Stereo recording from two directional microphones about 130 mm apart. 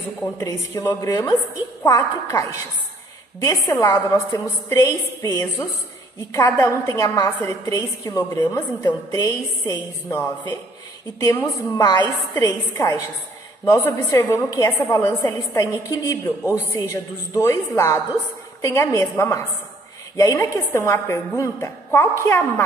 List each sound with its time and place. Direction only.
0.4 s a woman's voice: 25° left (ahead or behind)
11.1 s a woman's voice: 30° left (ahead or behind)